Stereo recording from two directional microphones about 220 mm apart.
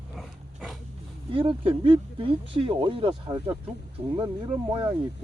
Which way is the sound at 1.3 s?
25° right (ahead or behind).